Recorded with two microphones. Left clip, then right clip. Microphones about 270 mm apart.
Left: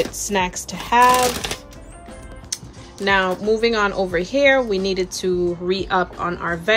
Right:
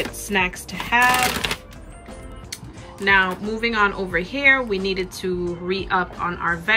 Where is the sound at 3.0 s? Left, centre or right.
Centre.